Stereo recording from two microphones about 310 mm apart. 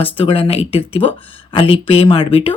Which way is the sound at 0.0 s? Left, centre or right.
Centre.